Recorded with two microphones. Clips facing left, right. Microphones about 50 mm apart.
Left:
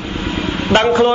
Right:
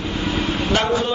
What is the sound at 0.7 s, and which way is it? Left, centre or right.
Speech, left.